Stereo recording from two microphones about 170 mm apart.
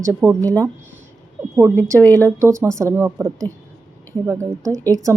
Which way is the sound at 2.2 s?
15° right (ahead or behind).